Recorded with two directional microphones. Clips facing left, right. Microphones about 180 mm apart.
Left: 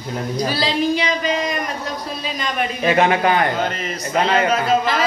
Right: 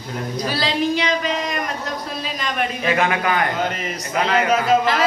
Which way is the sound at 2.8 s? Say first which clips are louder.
Left 6 dB; 30° left (ahead or behind).